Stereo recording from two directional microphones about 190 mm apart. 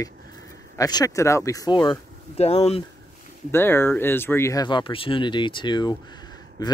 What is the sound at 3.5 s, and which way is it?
Speech, 10° left (ahead or behind).